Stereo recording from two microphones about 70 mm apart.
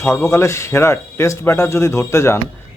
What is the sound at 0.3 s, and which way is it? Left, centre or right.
Speech, left.